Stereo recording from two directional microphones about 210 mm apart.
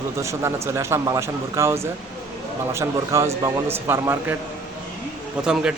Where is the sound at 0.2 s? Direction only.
15° right (ahead or behind).